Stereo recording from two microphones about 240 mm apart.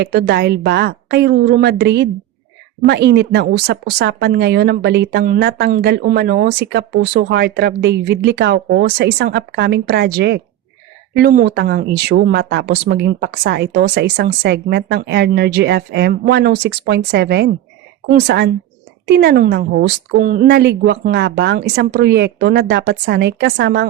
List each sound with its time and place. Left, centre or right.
0.0 s speech: right